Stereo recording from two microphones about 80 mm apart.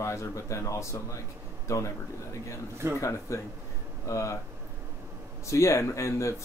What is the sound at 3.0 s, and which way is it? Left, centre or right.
Speech, left.